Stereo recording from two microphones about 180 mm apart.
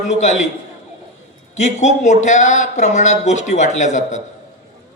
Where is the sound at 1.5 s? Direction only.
40° left (ahead or behind).